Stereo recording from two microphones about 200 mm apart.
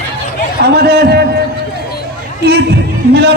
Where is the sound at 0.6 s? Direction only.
55° right (ahead or behind).